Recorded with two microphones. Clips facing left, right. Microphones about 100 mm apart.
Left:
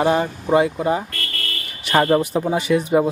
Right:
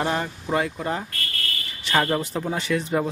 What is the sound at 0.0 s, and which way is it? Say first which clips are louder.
Speech: left 7 dB; 10° left (ahead or behind).